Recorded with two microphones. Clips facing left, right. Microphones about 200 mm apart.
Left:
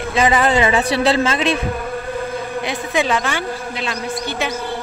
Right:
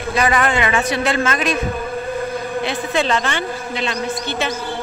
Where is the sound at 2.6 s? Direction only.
10° left (ahead or behind).